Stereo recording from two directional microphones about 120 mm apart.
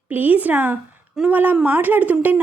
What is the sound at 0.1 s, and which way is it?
A woman's voice, 15° right (ahead or behind).